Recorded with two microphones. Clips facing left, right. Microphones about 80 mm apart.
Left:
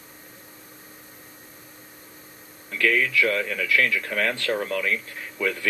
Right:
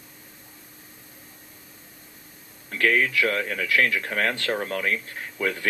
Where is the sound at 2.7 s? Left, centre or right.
Right.